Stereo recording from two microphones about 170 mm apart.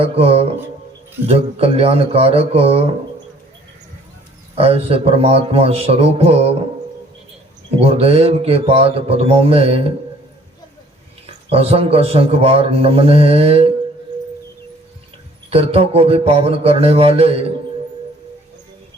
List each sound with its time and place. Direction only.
0.0 s a man's voice: 35° right (ahead or behind)
4.5 s a man's voice: 35° right (ahead or behind)
7.8 s a man's voice: 35° right (ahead or behind)
11.4 s a man's voice: 35° right (ahead or behind)
15.4 s a man's voice: 35° right (ahead or behind)